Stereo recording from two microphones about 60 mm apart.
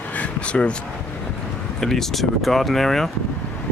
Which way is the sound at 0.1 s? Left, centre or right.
Left.